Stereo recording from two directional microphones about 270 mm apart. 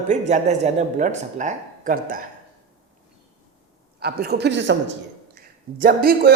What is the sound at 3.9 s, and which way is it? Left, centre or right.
A woman's voice, right.